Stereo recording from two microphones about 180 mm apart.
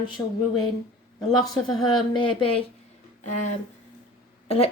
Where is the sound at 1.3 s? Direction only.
20° left (ahead or behind).